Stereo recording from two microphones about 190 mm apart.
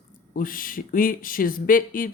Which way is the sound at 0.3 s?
50° left (ahead or behind).